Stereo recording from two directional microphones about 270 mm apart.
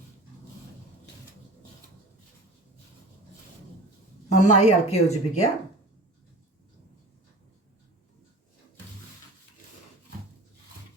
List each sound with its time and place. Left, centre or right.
4.3 s a woman's voice: left